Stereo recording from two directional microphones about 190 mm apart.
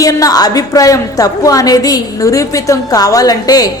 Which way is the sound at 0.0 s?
20° left (ahead or behind).